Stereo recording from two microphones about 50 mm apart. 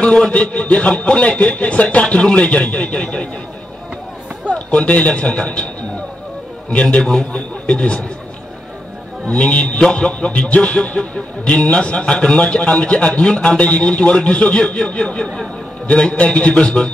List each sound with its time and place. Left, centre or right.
0.0 s a man's voice: left
4.6 s a man's voice: left
9.3 s a man's voice: left